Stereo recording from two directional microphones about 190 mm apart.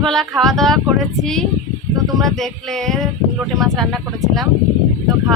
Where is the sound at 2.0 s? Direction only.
Centre (ahead or behind).